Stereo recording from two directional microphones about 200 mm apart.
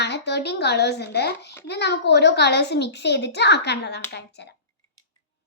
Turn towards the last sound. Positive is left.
turn(degrees=60)  # may be behind; listen again after turning